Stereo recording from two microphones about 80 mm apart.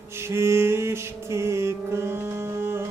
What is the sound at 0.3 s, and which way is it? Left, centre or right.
Music, right.